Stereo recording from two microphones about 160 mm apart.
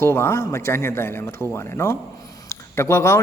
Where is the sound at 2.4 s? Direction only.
15° left (ahead or behind).